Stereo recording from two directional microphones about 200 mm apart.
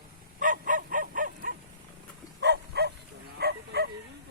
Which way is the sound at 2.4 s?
55° right (ahead or behind).